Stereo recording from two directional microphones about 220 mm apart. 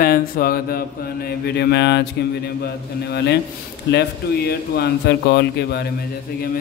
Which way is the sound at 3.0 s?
50° left (ahead or behind).